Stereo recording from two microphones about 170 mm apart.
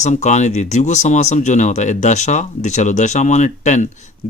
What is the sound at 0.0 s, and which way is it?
Speech, 45° left (ahead or behind).